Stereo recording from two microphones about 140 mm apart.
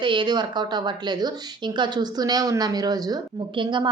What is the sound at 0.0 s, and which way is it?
A woman's voice, 35° right (ahead or behind).